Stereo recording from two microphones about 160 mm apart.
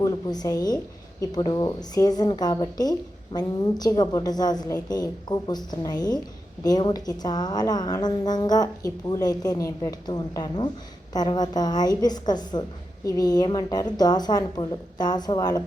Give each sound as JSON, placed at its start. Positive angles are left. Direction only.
{"t": 0.0, "sound": "a woman's voice", "side_deg": 20}